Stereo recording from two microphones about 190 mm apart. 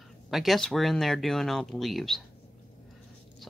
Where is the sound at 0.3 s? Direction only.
Centre (ahead or behind).